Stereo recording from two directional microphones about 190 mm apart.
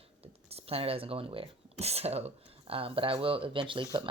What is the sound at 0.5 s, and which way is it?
Speech, 30° right (ahead or behind).